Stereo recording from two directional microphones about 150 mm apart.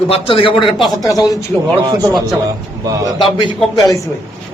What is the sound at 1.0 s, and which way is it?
Speech, 25° left (ahead or behind).